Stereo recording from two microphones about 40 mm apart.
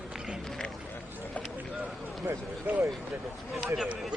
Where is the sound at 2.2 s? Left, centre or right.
Right.